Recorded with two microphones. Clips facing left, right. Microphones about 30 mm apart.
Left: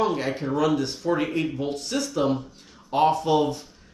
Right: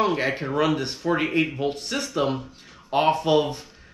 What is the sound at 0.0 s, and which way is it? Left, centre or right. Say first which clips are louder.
Speech: right 1 dB; right.